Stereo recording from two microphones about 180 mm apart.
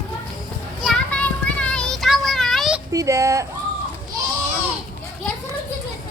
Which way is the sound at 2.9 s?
20° right (ahead or behind).